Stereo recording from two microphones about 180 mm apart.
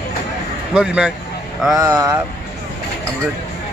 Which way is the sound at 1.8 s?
20° right (ahead or behind).